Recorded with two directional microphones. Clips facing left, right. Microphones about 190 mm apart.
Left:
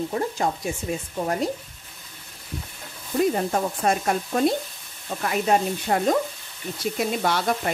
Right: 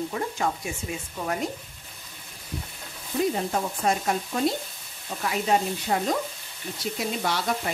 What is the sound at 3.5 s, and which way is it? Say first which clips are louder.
Speech: left 3 dB; 50° left (ahead or behind).